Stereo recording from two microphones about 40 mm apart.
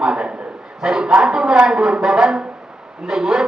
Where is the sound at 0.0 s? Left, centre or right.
Right.